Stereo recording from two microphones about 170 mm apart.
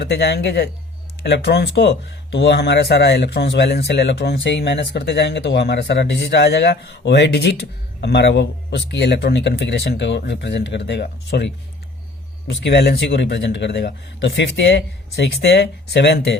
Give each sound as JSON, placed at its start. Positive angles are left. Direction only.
{"t": 0.0, "sound": "speech", "side_deg": 85}